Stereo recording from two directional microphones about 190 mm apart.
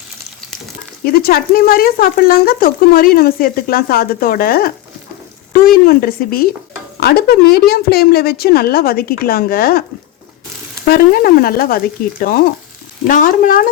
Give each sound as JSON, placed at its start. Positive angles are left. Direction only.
{"t": 1.0, "sound": "speech", "side_deg": 55}
{"t": 10.8, "sound": "speech", "side_deg": 50}